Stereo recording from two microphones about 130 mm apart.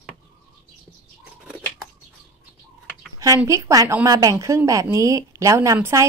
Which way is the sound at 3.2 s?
25° right (ahead or behind).